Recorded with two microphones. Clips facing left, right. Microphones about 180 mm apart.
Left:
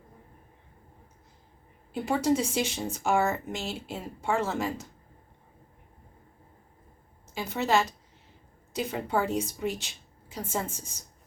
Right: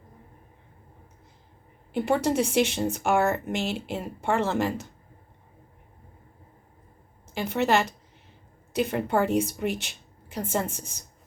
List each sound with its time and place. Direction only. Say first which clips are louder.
1.9 s a woman's voice: right 2 dB; 65° right (ahead or behind)
7.3 s a woman's voice: right 3 dB; 65° right (ahead or behind)